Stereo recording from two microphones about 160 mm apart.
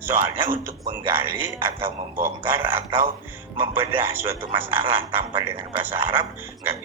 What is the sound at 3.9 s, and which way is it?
Speech, 15° right (ahead or behind).